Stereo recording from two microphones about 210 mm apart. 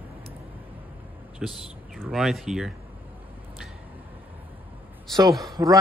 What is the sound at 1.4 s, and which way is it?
Speech, centre (ahead or behind).